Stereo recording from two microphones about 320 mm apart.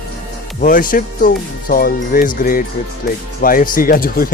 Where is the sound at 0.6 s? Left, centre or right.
Left.